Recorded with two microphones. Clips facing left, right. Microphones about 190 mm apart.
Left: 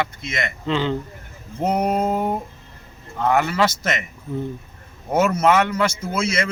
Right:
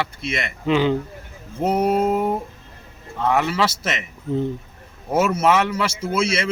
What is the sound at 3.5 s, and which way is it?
Speech, 5° right (ahead or behind).